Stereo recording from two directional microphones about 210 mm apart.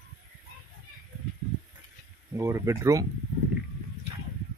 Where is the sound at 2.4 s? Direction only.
15° right (ahead or behind).